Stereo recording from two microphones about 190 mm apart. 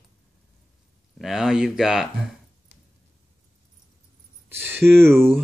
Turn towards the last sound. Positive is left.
turn(degrees=-10)  # may be behind; listen again after turning